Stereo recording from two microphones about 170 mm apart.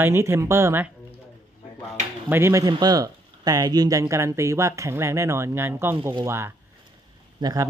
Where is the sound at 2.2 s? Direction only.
15° right (ahead or behind).